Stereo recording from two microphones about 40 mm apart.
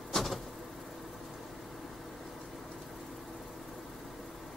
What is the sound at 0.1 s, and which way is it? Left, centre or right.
Vehicle, centre.